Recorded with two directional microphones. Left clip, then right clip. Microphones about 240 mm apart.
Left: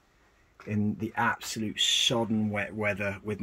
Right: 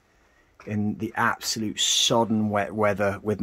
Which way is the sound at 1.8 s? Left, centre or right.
Right.